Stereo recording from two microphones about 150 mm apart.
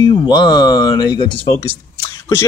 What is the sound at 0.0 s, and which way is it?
Speech, 30° left (ahead or behind).